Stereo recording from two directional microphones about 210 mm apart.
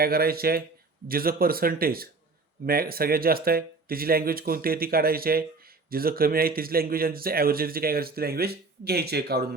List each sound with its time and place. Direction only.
0.0 s speech: 45° right (ahead or behind)